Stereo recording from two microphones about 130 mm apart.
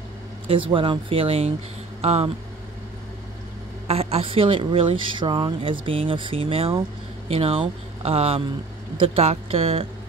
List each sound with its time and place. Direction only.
0.5 s speech: 40° right (ahead or behind)
3.8 s speech: 50° right (ahead or behind)